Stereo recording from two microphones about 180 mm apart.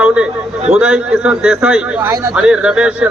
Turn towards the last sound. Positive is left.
turn(degrees=-5)  # may be behind; listen again after turning